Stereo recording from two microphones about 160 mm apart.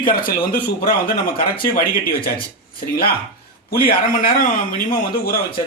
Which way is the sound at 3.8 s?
65° left (ahead or behind).